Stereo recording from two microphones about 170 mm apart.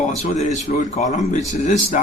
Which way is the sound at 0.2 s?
40° left (ahead or behind).